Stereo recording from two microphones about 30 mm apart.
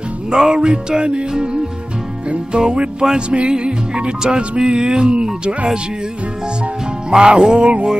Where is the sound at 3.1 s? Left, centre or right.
Right.